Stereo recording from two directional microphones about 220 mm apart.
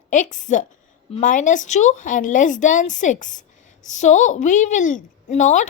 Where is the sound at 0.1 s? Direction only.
35° left (ahead or behind).